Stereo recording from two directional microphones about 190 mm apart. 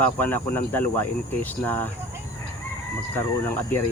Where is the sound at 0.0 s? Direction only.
10° left (ahead or behind).